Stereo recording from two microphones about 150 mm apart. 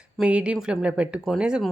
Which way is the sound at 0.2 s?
5° right (ahead or behind).